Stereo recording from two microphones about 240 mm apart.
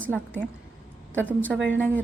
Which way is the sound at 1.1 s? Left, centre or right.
Centre.